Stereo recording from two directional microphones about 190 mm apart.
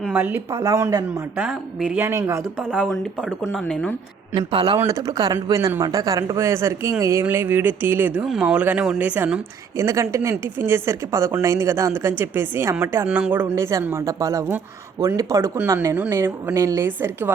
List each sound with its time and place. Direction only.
0.0 s speech: 10° right (ahead or behind)
1.4 s speech: 5° right (ahead or behind)
2.7 s speech: centre (ahead or behind)
4.4 s a man's voice: 25° right (ahead or behind)